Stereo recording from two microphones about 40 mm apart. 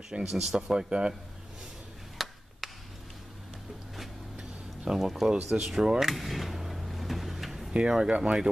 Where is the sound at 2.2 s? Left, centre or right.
Centre.